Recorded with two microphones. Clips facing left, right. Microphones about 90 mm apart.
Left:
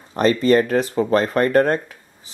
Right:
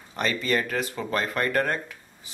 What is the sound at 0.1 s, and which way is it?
Speech, 35° left (ahead or behind).